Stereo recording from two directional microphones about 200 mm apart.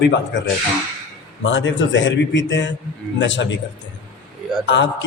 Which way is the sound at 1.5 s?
65° left (ahead or behind).